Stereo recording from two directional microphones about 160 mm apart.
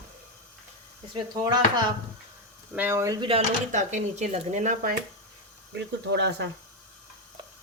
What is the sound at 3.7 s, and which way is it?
Speech, 50° right (ahead or behind).